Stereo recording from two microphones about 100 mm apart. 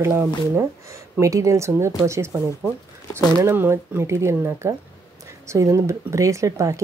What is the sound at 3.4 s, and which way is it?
Speech, 25° right (ahead or behind).